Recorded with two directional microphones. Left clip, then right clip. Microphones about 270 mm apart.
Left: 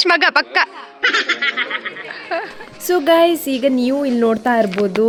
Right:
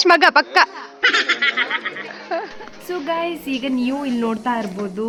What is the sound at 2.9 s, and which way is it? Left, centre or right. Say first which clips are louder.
Speech: left 10 dB; left.